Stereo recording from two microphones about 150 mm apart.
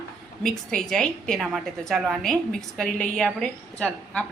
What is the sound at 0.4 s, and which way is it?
A woman's voice, 5° left (ahead or behind).